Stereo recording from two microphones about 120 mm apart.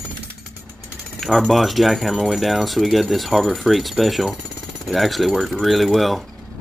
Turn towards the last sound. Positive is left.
turn(degrees=0)  # may be behind; listen again after turning